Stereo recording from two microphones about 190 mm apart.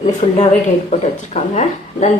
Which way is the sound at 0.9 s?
40° left (ahead or behind).